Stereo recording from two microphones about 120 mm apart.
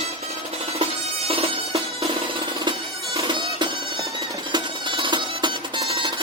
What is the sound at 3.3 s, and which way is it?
Music, 40° right (ahead or behind).